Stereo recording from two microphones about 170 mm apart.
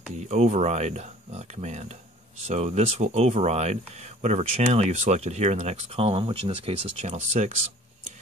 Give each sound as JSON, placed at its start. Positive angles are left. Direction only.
{"t": 0.1, "sound": "speech", "side_deg": -40}